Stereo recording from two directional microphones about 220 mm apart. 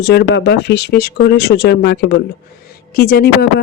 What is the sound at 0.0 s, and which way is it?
Speech, 50° left (ahead or behind).